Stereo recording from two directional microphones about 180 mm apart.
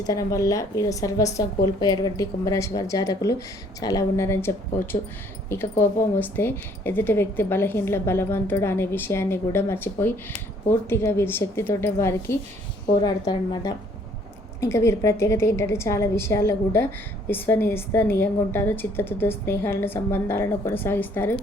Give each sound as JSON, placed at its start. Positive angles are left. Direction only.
{"t": 0.0, "sound": "a woman's voice", "side_deg": 20}